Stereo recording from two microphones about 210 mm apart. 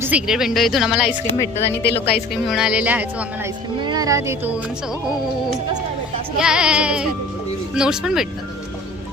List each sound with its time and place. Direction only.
0.0 s speech: 5° right (ahead or behind)
1.8 s a woman's voice: 50° left (ahead or behind)
2.5 s speech: 5° right (ahead or behind)
3.8 s speech: 15° right (ahead or behind)
6.4 s speech: 5° right (ahead or behind)